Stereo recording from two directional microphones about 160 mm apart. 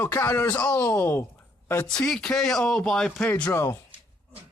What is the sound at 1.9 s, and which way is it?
Speech, 5° left (ahead or behind).